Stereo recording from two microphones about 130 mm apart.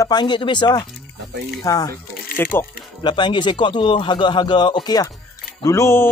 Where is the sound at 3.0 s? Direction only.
35° left (ahead or behind); by 6.1 s 20° left (ahead or behind).